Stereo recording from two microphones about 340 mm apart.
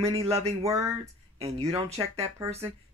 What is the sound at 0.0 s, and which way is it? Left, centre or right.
Speech, centre.